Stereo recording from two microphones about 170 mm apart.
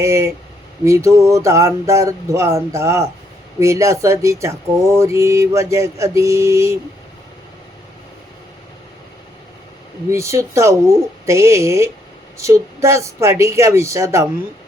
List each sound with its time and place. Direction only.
0.0 s speech: 15° right (ahead or behind)
10.1 s speech: 15° right (ahead or behind)